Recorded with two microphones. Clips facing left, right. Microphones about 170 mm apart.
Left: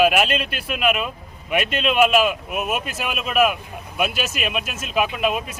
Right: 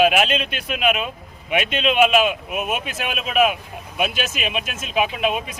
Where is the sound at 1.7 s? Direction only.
45° left (ahead or behind).